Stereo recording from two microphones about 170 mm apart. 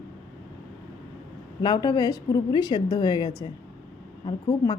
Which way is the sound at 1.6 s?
25° left (ahead or behind).